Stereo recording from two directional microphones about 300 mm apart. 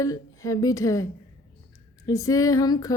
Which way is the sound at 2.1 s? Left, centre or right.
Centre.